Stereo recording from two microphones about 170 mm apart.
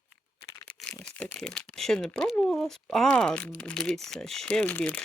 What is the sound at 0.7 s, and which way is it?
Shuffling cards, 5° left (ahead or behind).